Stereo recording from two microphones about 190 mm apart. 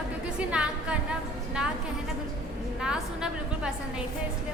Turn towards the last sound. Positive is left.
turn(degrees=-5)  # may be behind; listen again after turning